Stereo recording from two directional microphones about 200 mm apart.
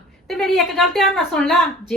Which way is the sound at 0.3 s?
Centre (ahead or behind).